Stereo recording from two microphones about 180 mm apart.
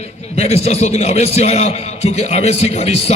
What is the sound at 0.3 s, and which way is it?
A man's voice, 35° left (ahead or behind).